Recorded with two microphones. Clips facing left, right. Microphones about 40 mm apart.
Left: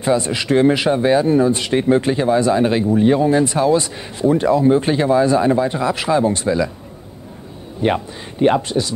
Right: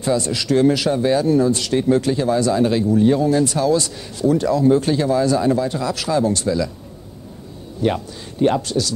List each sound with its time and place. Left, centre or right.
0.0 s speech: left
7.8 s speech: left